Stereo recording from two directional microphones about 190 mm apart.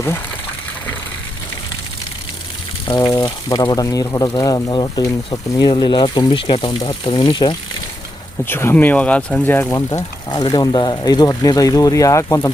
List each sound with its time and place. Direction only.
3.1 s speech: 20° left (ahead or behind)
8.4 s speech: 10° left (ahead or behind)